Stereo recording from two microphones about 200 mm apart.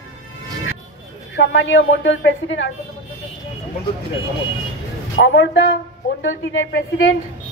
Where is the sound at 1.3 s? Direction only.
65° left (ahead or behind).